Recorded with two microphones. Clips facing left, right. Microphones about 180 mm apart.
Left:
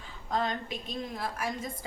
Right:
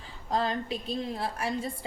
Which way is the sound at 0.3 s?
30° right (ahead or behind).